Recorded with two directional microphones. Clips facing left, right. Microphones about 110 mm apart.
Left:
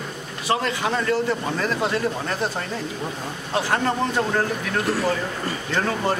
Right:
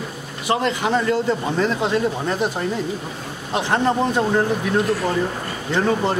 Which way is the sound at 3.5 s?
20° right (ahead or behind).